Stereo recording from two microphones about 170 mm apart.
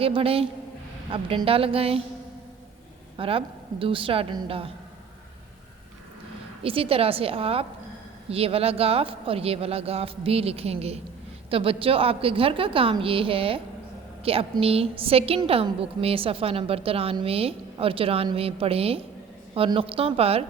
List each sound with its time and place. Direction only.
0.0 s a woman's voice: 35° right (ahead or behind)
3.2 s a woman's voice: 30° right (ahead or behind)
6.6 s a woman's voice: 35° right (ahead or behind)